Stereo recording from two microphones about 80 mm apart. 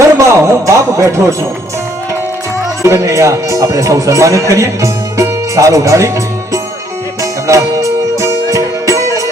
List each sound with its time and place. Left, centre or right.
0.0 s a sound: right
0.9 s a man's voice: right
2.8 s a man's voice: right
7.2 s music: right